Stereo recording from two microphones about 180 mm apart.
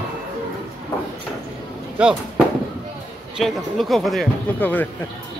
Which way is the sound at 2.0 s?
10° right (ahead or behind).